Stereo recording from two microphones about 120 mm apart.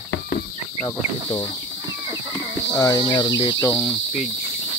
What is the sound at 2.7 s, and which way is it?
Speech, 25° left (ahead or behind).